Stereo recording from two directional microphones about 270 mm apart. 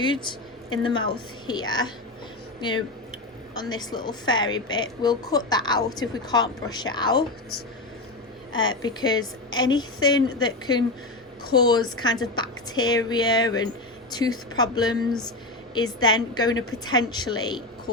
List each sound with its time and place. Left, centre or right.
0.0 s a woman's voice: centre
8.8 s a woman's voice: centre